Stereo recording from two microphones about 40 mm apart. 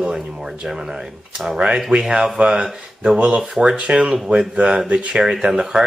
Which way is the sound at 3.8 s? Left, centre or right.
Right.